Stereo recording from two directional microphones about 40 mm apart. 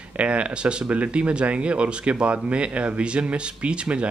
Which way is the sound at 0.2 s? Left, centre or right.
Right.